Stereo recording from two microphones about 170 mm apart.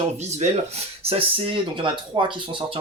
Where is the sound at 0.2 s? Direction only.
40° right (ahead or behind).